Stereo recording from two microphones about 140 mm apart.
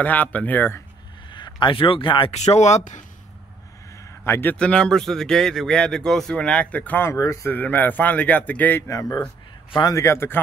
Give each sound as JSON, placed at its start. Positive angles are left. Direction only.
{"t": 0.0, "sound": "a man's voice", "side_deg": 10}
{"t": 1.3, "sound": "speech", "side_deg": 35}
{"t": 2.3, "sound": "speech", "side_deg": 50}
{"t": 3.9, "sound": "a man's voice", "side_deg": 20}